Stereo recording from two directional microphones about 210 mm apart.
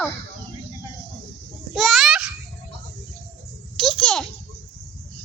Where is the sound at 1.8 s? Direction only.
Centre (ahead or behind).